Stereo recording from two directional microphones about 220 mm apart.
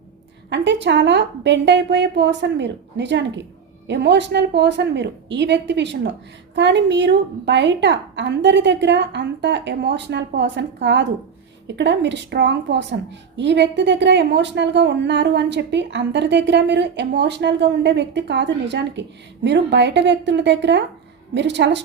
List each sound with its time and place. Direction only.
0.5 s a woman's voice: 55° right (ahead or behind)